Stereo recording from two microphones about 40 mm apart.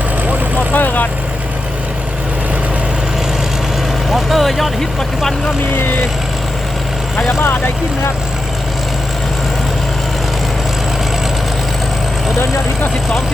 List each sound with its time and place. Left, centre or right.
0.7 s vehicle: left
4.1 s vehicle: centre